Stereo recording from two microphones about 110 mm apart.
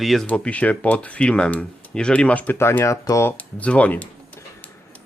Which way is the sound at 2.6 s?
25° left (ahead or behind).